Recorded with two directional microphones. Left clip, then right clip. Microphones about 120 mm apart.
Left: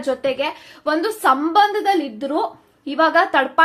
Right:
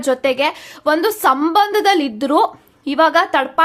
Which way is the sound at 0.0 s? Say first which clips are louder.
Right 5 dB; 35° right (ahead or behind).